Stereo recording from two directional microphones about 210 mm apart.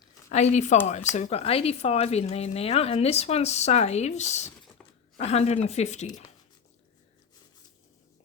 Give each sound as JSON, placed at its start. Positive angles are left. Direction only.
{"t": 0.3, "sound": "speech", "side_deg": 35}